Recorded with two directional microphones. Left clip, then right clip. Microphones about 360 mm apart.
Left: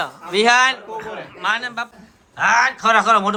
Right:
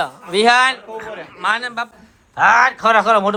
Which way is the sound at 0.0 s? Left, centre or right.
Centre.